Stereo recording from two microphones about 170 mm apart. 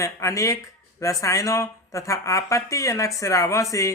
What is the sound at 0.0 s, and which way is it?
Speech, 20° left (ahead or behind).